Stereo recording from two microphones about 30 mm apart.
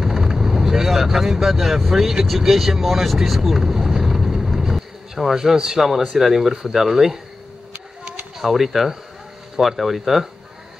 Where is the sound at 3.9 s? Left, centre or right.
Centre.